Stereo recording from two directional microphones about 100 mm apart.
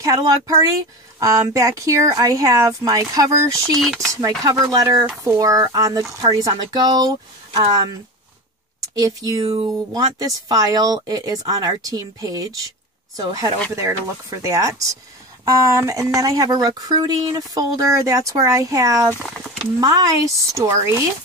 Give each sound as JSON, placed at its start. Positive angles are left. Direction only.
{"t": 0.0, "sound": "speech", "side_deg": -35}
{"t": 3.8, "sound": "speech", "side_deg": 0}
{"t": 4.1, "sound": "speech", "side_deg": -35}
{"t": 8.9, "sound": "speech", "side_deg": -35}
{"t": 13.7, "sound": "speech", "side_deg": -30}
{"t": 19.2, "sound": "speech", "side_deg": 0}
{"t": 19.6, "sound": "speech", "side_deg": -40}